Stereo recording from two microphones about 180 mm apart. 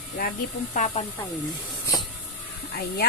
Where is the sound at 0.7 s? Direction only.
45° left (ahead or behind).